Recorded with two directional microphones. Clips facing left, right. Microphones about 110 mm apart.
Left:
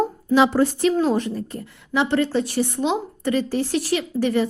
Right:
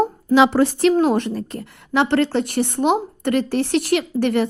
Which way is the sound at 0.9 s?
60° right (ahead or behind).